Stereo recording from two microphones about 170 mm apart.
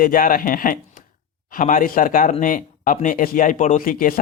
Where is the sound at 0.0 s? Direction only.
55° left (ahead or behind).